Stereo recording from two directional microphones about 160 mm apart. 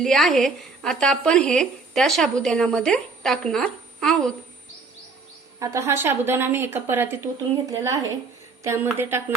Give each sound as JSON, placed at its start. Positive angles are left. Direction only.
{"t": 0.0, "sound": "speech", "side_deg": 0}
{"t": 5.5, "sound": "a woman's voice", "side_deg": -20}